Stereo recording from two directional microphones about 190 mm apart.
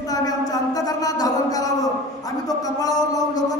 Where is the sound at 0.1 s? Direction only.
20° left (ahead or behind).